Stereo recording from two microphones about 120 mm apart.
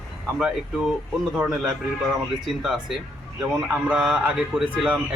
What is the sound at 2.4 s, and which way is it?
A man's voice, 5° right (ahead or behind).